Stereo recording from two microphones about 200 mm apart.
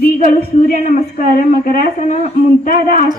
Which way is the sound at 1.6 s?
45° left (ahead or behind).